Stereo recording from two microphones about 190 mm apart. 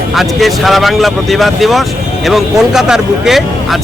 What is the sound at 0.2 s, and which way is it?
Speech, centre (ahead or behind).